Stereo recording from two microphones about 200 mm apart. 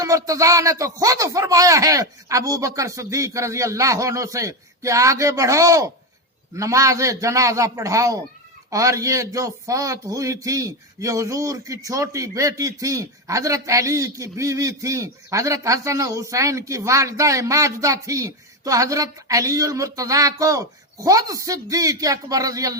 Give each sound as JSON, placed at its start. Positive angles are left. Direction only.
{"t": 0.0, "sound": "a man's voice", "side_deg": -15}